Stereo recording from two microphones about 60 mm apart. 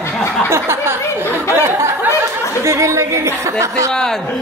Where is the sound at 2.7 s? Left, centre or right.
Right.